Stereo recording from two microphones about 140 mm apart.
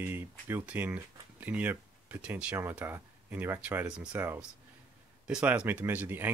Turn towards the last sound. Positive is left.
turn(degrees=-15)  # may be behind; listen again after turning